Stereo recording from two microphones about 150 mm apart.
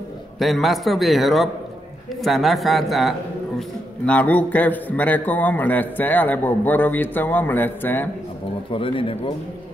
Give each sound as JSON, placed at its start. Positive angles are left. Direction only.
{"t": 0.4, "sound": "a man's voice", "side_deg": 0}
{"t": 8.7, "sound": "speech", "side_deg": 35}